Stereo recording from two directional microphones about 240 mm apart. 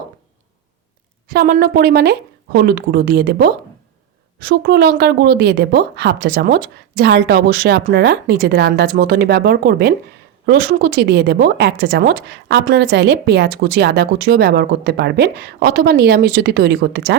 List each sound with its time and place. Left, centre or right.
1.3 s a woman's voice: right